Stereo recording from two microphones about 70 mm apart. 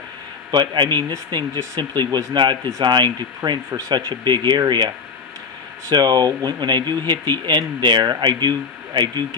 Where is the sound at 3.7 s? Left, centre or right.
Right.